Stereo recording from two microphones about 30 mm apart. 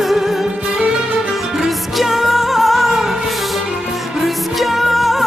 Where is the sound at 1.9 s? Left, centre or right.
Centre.